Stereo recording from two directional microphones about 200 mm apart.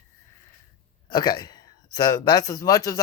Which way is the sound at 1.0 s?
20° left (ahead or behind).